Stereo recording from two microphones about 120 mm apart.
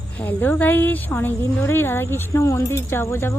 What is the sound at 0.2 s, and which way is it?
A woman's voice, 15° left (ahead or behind).